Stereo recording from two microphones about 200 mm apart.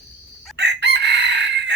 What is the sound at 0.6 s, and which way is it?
Chicken, 60° right (ahead or behind).